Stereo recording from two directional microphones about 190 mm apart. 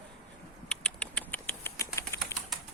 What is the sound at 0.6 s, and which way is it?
Typing, 5° left (ahead or behind).